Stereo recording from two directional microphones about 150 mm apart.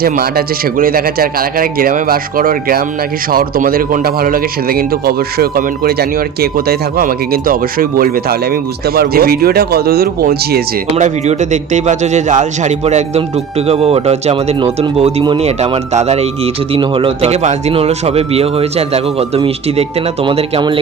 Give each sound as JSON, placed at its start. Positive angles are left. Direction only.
{"t": 0.0, "sound": "speech", "side_deg": -85}
{"t": 9.0, "sound": "speech", "side_deg": -90}
{"t": 10.9, "sound": "speech", "side_deg": -50}
{"t": 16.7, "sound": "speech", "side_deg": -35}
{"t": 20.2, "sound": "speech", "side_deg": -35}